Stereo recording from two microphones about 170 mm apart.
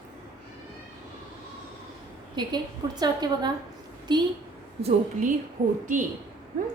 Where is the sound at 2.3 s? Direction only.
25° right (ahead or behind).